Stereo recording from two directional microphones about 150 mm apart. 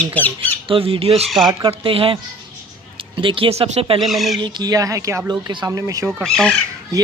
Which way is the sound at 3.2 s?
35° right (ahead or behind).